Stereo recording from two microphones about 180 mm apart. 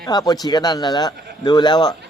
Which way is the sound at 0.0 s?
20° left (ahead or behind).